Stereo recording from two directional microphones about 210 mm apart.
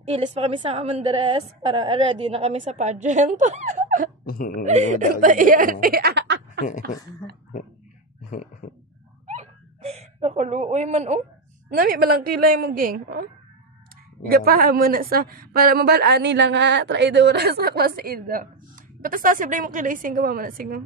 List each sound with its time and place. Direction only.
0.1 s a woman's voice: 30° right (ahead or behind)
4.3 s speech: 40° left (ahead or behind)
4.6 s a woman's voice: 35° right (ahead or behind); by 6.6 s 55° right (ahead or behind)
9.3 s hiccup: 30° right (ahead or behind)
11.7 s speech: 45° right (ahead or behind)
14.3 s a woman's voice: 45° right (ahead or behind)